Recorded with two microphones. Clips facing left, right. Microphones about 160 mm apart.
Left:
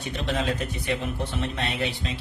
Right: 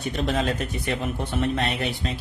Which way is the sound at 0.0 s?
45° right (ahead or behind).